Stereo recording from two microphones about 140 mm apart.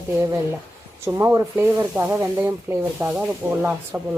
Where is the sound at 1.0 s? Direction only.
20° right (ahead or behind).